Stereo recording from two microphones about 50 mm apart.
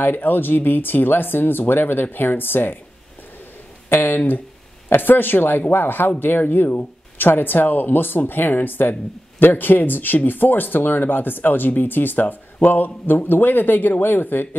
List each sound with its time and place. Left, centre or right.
0.0 s speech: left
3.9 s speech: left